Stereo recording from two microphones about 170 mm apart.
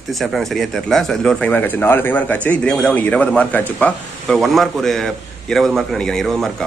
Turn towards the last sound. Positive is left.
turn(degrees=0)  # may be behind; listen again after turning